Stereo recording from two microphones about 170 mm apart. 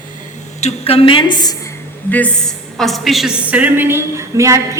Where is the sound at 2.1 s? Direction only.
10° left (ahead or behind).